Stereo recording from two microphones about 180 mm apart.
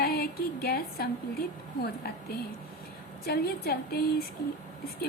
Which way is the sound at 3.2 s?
60° left (ahead or behind).